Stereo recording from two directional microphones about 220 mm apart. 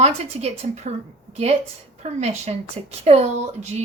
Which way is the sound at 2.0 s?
30° right (ahead or behind).